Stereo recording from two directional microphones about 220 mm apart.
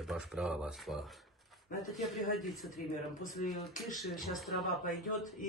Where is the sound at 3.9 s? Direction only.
Centre (ahead or behind).